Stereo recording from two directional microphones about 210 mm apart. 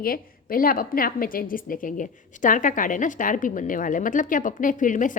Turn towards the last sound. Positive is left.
turn(degrees=40)  # may be behind; listen again after turning